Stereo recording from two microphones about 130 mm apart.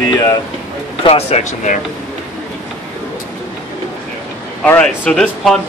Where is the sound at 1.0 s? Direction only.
55° left (ahead or behind).